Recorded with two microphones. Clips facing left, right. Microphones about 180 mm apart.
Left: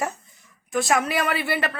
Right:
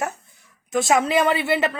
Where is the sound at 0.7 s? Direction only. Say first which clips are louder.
Right 4 dB; 20° right (ahead or behind).